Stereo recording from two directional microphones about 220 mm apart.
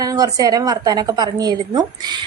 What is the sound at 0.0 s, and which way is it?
A woman's voice, 15° right (ahead or behind).